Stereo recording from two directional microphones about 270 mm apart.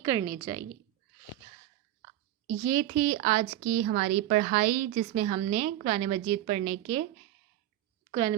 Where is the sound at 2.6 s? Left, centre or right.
Centre.